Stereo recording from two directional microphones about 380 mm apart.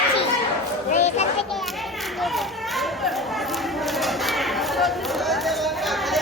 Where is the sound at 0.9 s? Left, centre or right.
Centre.